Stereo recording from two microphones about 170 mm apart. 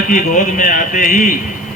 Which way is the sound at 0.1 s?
50° left (ahead or behind).